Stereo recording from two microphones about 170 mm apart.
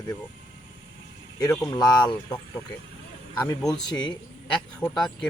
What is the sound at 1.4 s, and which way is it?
Speech, 20° left (ahead or behind).